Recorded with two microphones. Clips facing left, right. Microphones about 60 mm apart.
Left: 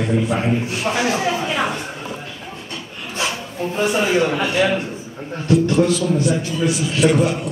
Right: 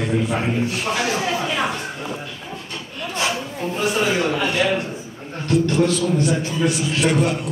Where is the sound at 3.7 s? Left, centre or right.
Centre.